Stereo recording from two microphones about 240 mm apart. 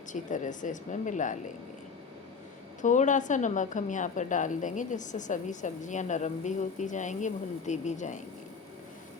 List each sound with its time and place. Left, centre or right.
0.1 s a woman's voice: left
2.8 s a woman's voice: left